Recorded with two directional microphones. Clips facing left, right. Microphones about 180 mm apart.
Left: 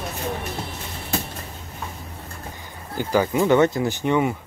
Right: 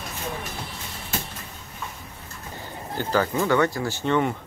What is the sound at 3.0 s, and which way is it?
Speech, 15° left (ahead or behind).